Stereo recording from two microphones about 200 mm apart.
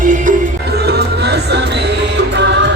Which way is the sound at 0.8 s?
55° right (ahead or behind).